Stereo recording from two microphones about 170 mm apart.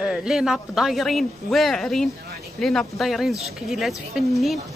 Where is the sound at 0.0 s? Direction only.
5° right (ahead or behind).